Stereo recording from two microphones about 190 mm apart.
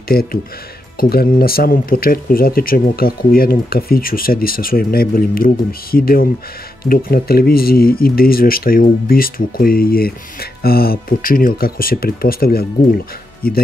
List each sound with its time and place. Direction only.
0.1 s speech: 50° left (ahead or behind)